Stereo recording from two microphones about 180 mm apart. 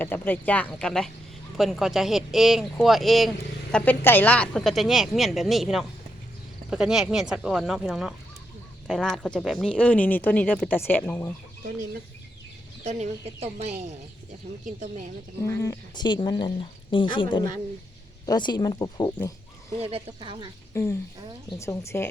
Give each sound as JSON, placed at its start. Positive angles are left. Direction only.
{"t": 0.0, "sound": "speech", "side_deg": 10}
{"t": 12.8, "sound": "speech", "side_deg": -40}
{"t": 15.4, "sound": "speech", "side_deg": 20}
{"t": 19.8, "sound": "speech", "side_deg": -30}
{"t": 20.7, "sound": "speech", "side_deg": 15}